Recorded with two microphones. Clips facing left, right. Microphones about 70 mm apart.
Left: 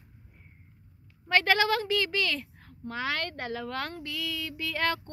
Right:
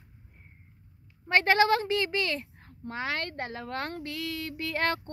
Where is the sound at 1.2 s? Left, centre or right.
Right.